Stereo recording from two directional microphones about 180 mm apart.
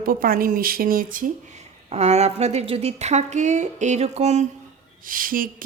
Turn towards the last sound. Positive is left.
turn(degrees=-50)  # may be behind; listen again after turning